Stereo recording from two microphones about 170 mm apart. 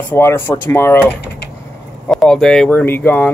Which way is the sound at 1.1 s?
80° left.